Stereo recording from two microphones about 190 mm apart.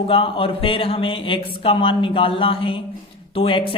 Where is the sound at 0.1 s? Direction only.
30° left (ahead or behind).